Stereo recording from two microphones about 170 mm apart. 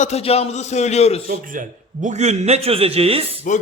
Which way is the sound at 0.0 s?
40° left (ahead or behind).